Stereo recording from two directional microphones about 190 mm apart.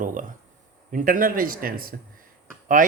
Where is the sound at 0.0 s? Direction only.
45° right (ahead or behind).